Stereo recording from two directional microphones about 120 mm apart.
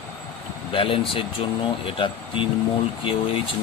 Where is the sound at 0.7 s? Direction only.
50° left (ahead or behind).